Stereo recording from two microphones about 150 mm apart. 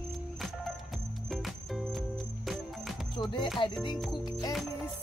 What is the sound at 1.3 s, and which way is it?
Music, centre (ahead or behind).